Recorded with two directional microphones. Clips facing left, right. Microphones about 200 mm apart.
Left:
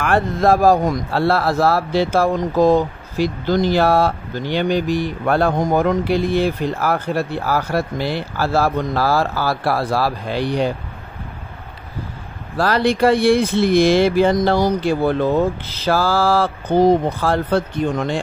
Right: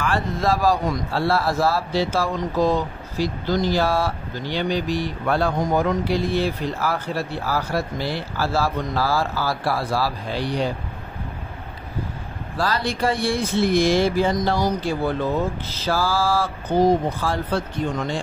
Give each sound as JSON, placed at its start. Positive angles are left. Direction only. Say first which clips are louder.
{"t": 0.0, "sound": "speech", "louder": "left 6 dB", "side_deg": 55}
{"t": 12.5, "sound": "speech", "louder": "left 7 dB", "side_deg": 60}